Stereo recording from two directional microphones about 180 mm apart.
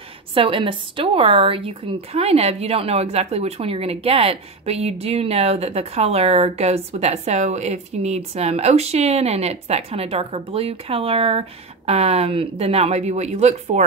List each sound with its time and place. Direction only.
0.3 s a woman's voice: 30° right (ahead or behind)